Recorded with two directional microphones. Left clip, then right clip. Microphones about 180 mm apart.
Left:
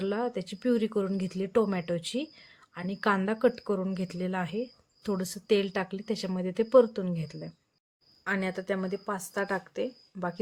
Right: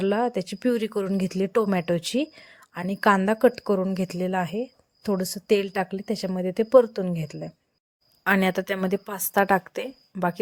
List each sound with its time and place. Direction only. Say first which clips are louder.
0.0 s speech: right 7 dB; 35° right (ahead or behind)
8.2 s a woman's voice: right 9 dB; 55° right (ahead or behind)